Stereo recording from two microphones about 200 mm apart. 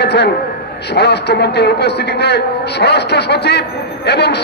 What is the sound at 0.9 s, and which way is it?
A man's voice, 55° left (ahead or behind).